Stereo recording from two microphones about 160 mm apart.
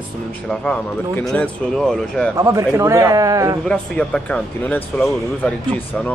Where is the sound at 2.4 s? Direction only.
20° right (ahead or behind).